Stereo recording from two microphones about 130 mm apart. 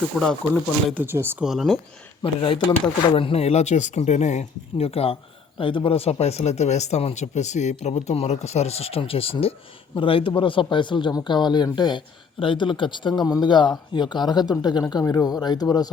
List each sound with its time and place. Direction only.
0.1 s speech: centre (ahead or behind)
0.9 s speech: 15° right (ahead or behind)
1.5 s speech: centre (ahead or behind)
2.2 s speech: 45° left (ahead or behind)